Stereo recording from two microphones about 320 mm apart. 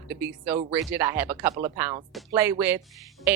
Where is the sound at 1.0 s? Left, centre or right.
Centre.